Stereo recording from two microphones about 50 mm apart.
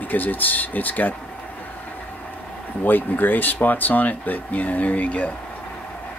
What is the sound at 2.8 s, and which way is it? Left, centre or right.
Speech, left.